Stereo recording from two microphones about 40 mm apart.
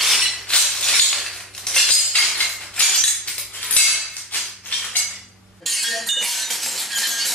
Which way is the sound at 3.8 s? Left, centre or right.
Left.